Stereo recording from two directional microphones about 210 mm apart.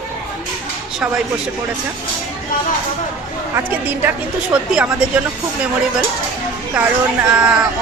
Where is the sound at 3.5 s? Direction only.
10° right (ahead or behind).